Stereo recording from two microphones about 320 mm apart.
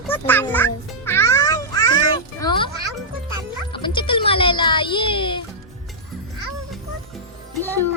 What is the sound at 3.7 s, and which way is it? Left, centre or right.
A child's voice, centre.